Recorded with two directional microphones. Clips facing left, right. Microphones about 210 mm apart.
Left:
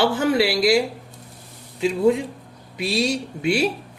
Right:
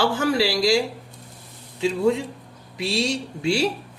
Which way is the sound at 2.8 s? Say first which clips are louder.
Left 2 dB; 25° right (ahead or behind).